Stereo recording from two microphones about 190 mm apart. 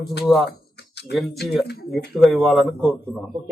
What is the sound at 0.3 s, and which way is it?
A man's voice, centre (ahead or behind).